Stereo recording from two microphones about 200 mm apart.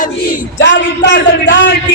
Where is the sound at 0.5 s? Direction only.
60° left (ahead or behind).